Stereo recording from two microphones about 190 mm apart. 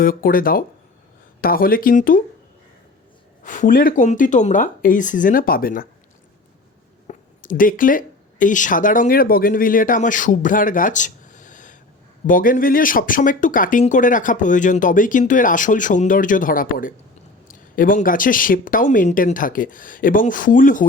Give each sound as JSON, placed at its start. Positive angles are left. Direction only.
{"t": 0.0, "sound": "speech", "side_deg": 50}
{"t": 3.4, "sound": "speech", "side_deg": 45}
{"t": 7.1, "sound": "speech", "side_deg": 45}